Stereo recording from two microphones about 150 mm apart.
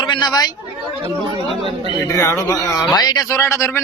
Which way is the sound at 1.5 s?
35° right (ahead or behind).